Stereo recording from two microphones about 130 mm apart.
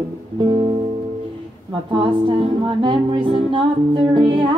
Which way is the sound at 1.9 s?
40° right (ahead or behind).